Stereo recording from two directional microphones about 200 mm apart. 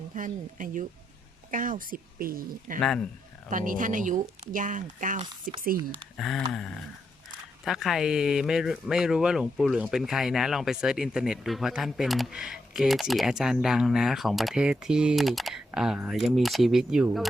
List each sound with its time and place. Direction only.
0.1 s speech: 40° right (ahead or behind)
2.8 s speech: centre (ahead or behind)
3.5 s speech: 40° right (ahead or behind)
6.1 s speech: centre (ahead or behind)
7.6 s speech: centre (ahead or behind)